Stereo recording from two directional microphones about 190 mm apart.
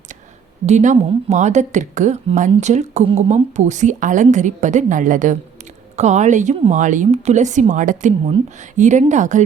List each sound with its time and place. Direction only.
0.6 s a woman's voice: 40° right (ahead or behind)